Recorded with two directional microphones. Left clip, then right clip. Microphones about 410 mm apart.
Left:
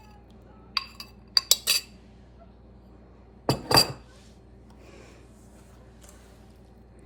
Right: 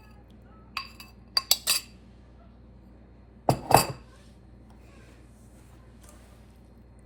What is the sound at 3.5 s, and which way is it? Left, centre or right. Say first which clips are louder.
Glass: right 1 dB; centre.